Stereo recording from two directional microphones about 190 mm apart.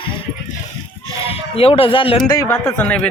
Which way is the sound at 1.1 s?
30° left (ahead or behind).